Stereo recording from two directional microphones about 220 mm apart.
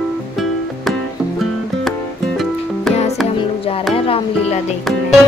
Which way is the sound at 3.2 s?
25° left (ahead or behind).